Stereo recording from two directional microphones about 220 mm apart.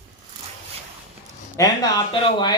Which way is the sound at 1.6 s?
15° left (ahead or behind).